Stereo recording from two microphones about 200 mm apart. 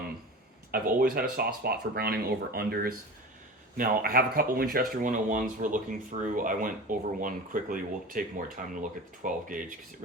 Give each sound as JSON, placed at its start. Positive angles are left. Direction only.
{"t": 0.7, "sound": "speech", "side_deg": -45}